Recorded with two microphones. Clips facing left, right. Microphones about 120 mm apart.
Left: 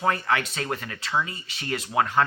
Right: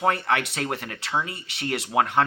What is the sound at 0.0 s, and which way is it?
Speech, 65° right (ahead or behind).